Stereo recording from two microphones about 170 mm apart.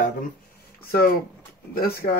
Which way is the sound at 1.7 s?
65° left (ahead or behind).